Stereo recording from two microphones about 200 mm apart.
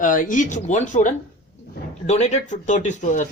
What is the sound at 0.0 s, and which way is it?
Speech, 40° left (ahead or behind).